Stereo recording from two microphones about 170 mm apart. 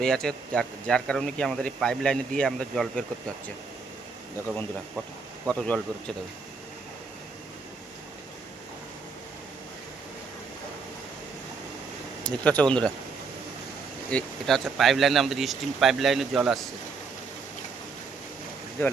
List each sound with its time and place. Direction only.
0.0 s speech: 5° left (ahead or behind)
5.5 s speech: 5° left (ahead or behind)
12.2 s speech: 5° left (ahead or behind)
14.1 s speech: 5° left (ahead or behind)
18.8 s speech: 10° left (ahead or behind)